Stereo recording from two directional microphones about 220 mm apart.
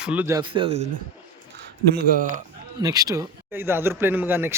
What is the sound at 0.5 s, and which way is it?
Speech, 25° right (ahead or behind).